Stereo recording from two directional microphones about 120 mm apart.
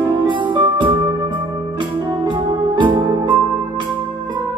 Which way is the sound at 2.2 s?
40° right (ahead or behind).